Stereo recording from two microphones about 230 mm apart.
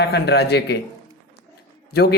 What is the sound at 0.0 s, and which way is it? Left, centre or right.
Speech, left.